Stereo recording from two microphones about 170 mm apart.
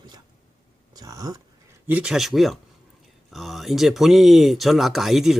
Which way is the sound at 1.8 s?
10° right (ahead or behind).